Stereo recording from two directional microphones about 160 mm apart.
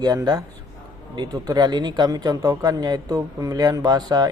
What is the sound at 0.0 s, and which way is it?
Speech, 25° right (ahead or behind).